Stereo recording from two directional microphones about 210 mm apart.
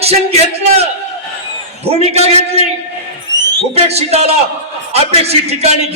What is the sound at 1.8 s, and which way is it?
Speech, 30° right (ahead or behind).